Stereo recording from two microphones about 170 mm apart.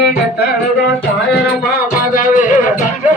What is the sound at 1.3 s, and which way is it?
Music, 60° left (ahead or behind).